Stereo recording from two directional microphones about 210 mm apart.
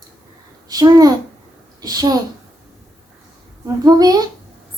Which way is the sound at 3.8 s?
20° right (ahead or behind).